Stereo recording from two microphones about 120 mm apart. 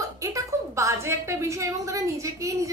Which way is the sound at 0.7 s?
25° right (ahead or behind).